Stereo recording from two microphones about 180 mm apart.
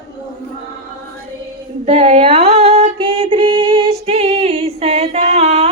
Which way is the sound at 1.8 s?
35° right (ahead or behind).